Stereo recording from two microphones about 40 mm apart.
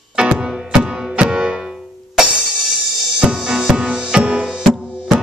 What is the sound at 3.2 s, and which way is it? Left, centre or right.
Music, centre.